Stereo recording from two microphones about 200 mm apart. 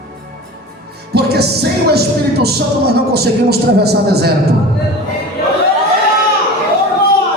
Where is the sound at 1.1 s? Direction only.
55° right (ahead or behind).